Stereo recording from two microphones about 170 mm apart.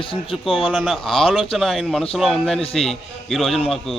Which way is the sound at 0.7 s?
5° right (ahead or behind).